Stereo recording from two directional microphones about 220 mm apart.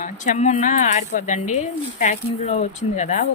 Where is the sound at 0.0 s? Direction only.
35° left (ahead or behind).